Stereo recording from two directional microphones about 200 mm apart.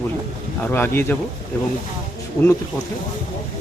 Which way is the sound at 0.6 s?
10° left (ahead or behind).